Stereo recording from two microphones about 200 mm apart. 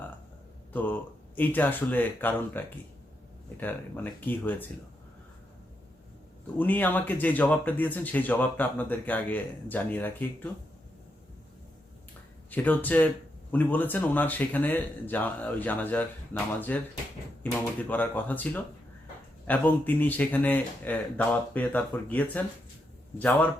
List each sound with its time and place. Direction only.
0.7 s speech: 10° left (ahead or behind)
6.6 s speech: 10° left (ahead or behind)
12.5 s speech: 10° left (ahead or behind)